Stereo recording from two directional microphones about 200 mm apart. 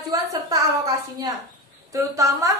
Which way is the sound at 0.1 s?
15° right (ahead or behind).